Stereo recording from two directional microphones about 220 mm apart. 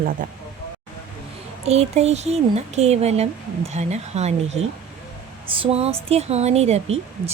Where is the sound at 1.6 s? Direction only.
30° right (ahead or behind).